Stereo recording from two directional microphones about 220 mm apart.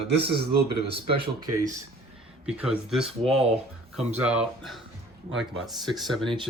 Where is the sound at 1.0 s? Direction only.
20° right (ahead or behind).